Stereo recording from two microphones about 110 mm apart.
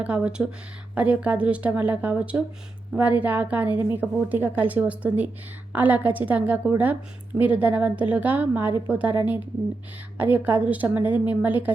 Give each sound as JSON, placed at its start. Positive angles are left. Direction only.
{"t": 0.0, "sound": "a woman's voice", "side_deg": -10}
{"t": 10.2, "sound": "a woman's voice", "side_deg": -15}